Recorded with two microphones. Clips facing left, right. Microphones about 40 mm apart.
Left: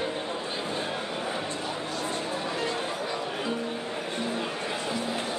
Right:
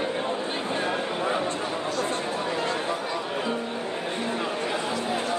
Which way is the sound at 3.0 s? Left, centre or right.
Centre.